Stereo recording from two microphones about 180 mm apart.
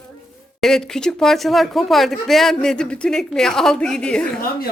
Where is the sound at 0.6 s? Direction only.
Centre (ahead or behind).